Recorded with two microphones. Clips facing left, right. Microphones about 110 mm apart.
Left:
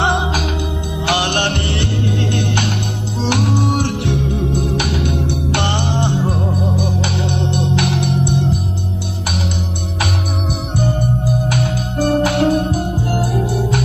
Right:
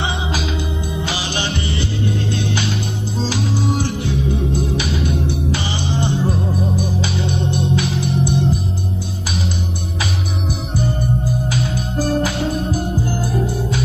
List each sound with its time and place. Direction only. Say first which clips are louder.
0.0 s music: left 5 dB; 60° left (ahead or behind)
10.8 s music: left 2 dB; 70° left (ahead or behind)